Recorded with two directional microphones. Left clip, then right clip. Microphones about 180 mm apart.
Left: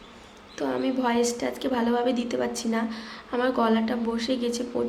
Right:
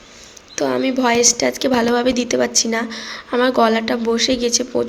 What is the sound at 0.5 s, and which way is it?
A woman's voice, 20° right (ahead or behind).